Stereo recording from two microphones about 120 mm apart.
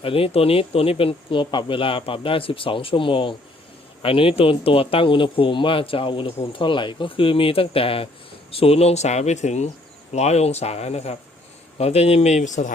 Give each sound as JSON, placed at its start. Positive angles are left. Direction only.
{"t": 0.0, "sound": "speech", "side_deg": 50}